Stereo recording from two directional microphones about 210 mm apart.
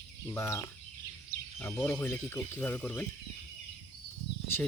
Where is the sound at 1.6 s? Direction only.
10° left (ahead or behind).